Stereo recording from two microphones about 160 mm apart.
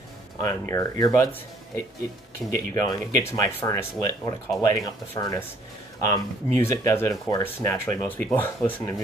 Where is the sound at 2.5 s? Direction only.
20° left (ahead or behind).